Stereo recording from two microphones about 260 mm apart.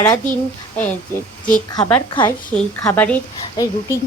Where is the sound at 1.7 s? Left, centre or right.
Centre.